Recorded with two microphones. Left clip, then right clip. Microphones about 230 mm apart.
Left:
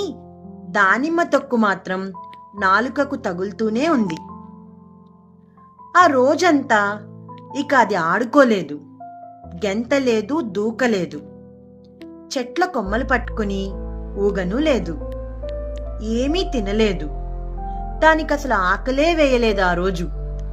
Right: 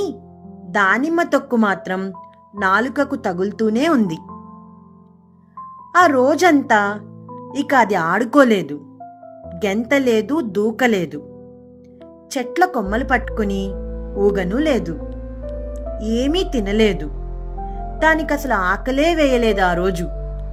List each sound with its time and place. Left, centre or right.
0.7 s a woman's voice: right
5.9 s a woman's voice: right
12.3 s a woman's voice: right
16.0 s a woman's voice: right